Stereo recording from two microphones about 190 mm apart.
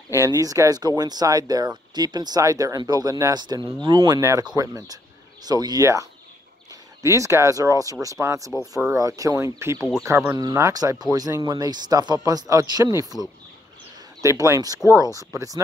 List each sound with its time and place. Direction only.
0.1 s speech: 15° right (ahead or behind)
14.2 s speech: 15° right (ahead or behind)